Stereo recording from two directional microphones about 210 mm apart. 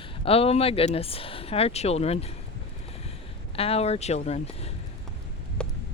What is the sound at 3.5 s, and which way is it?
Speech, 30° left (ahead or behind).